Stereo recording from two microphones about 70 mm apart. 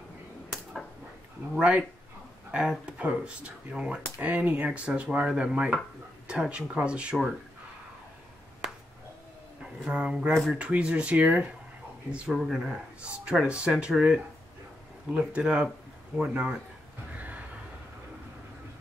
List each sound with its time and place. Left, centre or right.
1.5 s speech: centre
9.8 s speech: centre
12.4 s speech: centre
13.0 s speech: centre
17.1 s a sound: right